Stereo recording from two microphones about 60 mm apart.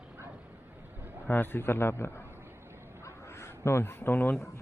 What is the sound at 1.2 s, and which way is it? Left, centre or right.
A man's voice, left.